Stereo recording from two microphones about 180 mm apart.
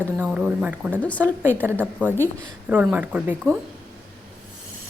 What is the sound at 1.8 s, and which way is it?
Speech, 5° right (ahead or behind).